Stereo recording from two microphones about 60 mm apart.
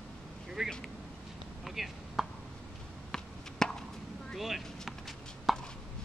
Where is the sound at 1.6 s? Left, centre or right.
Centre.